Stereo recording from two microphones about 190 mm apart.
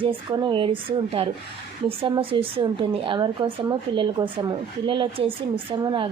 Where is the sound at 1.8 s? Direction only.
30° right (ahead or behind).